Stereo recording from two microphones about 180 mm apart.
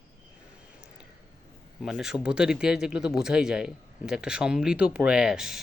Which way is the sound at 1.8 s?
Centre (ahead or behind).